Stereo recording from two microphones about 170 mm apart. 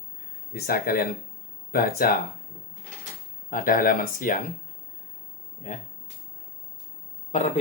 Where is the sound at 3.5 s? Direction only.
55° left (ahead or behind).